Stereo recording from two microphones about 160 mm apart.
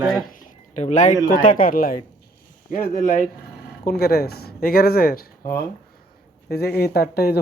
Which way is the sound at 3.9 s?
75° left (ahead or behind).